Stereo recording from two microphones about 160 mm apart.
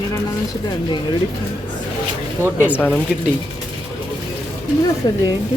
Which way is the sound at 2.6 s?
10° left (ahead or behind).